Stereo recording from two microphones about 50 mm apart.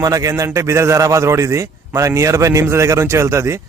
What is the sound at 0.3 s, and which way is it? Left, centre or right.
A man's voice, right.